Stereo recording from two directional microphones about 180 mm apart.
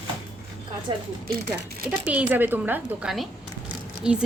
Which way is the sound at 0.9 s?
25° right (ahead or behind).